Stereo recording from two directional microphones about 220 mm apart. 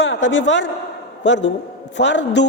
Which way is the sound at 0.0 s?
55° left (ahead or behind).